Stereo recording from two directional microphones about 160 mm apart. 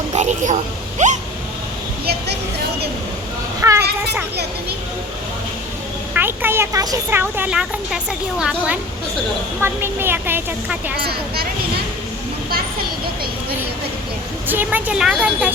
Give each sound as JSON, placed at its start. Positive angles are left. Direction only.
{"t": 0.1, "sound": "speech", "side_deg": -45}
{"t": 3.6, "sound": "a woman's voice", "side_deg": -20}
{"t": 6.1, "sound": "speech", "side_deg": -15}
{"t": 14.4, "sound": "speech", "side_deg": -10}